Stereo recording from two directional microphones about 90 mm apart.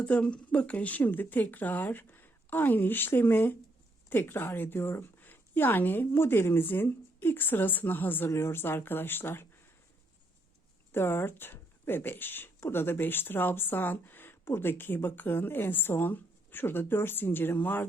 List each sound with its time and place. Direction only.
0.0 s speech: 15° left (ahead or behind)
10.9 s speech: 25° left (ahead or behind)